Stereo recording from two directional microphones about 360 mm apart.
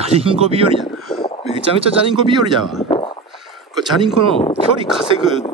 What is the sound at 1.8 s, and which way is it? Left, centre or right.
Speech, centre.